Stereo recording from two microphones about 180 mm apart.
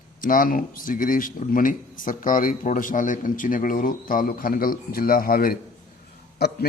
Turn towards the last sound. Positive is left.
turn(degrees=65)  # may be behind; listen again after turning